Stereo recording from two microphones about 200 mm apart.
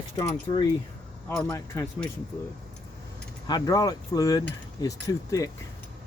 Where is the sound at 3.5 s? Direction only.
20° left (ahead or behind).